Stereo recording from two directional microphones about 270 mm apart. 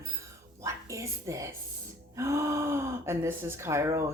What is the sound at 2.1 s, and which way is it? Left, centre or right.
Gasp, centre.